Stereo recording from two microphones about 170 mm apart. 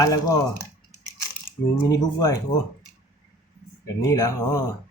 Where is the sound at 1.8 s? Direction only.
20° left (ahead or behind).